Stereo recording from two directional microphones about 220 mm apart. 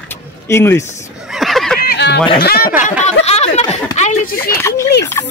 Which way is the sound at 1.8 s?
45° left (ahead or behind).